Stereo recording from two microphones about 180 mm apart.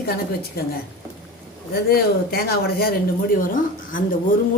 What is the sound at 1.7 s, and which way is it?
Speech, 60° left (ahead or behind).